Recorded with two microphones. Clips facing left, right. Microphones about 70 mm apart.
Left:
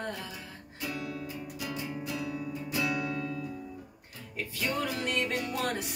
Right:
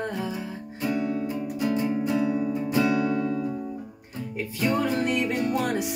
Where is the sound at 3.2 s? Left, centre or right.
Right.